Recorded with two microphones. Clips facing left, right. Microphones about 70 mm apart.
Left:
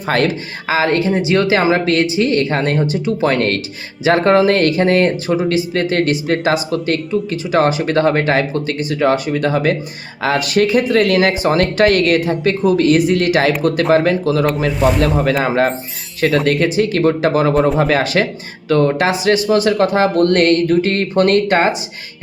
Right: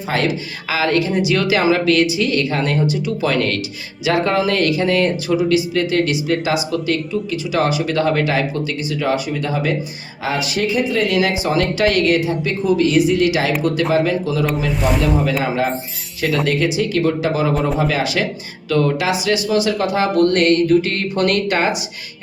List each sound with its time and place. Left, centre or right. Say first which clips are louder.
0.7 s speech: left 3 dB; left